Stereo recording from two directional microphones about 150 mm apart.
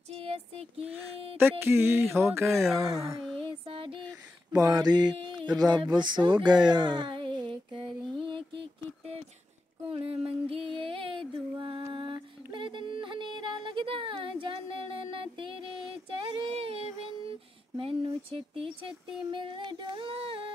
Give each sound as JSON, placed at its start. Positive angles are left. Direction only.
{"t": 0.2, "sound": "music", "side_deg": -40}
{"t": 1.4, "sound": "music", "side_deg": -15}
{"t": 2.4, "sound": "speech", "side_deg": 0}
{"t": 3.4, "sound": "music", "side_deg": -35}
{"t": 4.5, "sound": "speech", "side_deg": -25}
{"t": 6.7, "sound": "a sound", "side_deg": -30}